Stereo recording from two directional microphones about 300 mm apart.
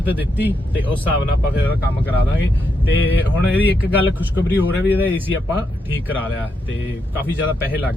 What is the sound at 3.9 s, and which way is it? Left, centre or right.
Speech, centre.